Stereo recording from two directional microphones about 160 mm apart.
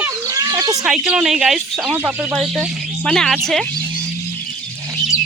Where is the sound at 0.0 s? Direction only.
20° right (ahead or behind).